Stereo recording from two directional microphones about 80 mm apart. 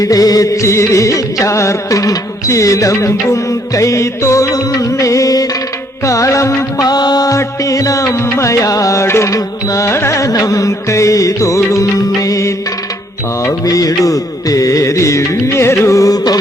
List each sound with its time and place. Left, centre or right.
0.0 s music: left
6.8 s music: left